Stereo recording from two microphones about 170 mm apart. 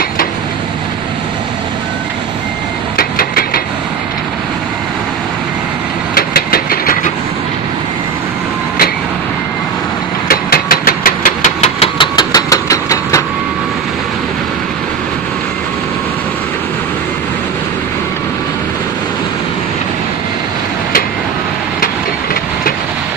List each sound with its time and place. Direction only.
3.0 s a sound: 60° left (ahead or behind)
6.1 s vehicle: 60° left (ahead or behind)
10.2 s engine: 60° left (ahead or behind); by 13.2 s 20° left (ahead or behind)